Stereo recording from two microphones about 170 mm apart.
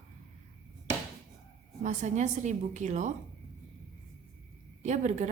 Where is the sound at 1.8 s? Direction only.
45° right (ahead or behind).